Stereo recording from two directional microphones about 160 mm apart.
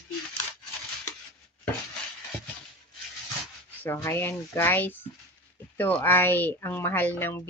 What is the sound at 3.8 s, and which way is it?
Speech, 15° left (ahead or behind).